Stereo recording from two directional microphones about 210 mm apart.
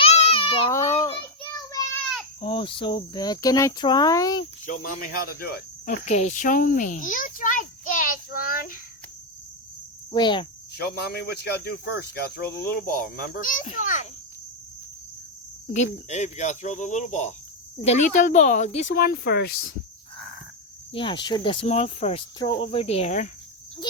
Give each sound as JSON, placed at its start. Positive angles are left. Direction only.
{"t": 0.0, "sound": "baby cry", "side_deg": 30}
{"t": 0.7, "sound": "a sound", "side_deg": 15}
{"t": 2.4, "sound": "speech", "side_deg": 25}
{"t": 4.6, "sound": "speech", "side_deg": 40}
{"t": 6.1, "sound": "a sound", "side_deg": 35}
{"t": 10.1, "sound": "speech", "side_deg": 20}
{"t": 10.8, "sound": "speech", "side_deg": 50}
{"t": 15.7, "sound": "speech", "side_deg": 35}
{"t": 18.9, "sound": "speech", "side_deg": 45}
{"t": 20.9, "sound": "speech", "side_deg": 25}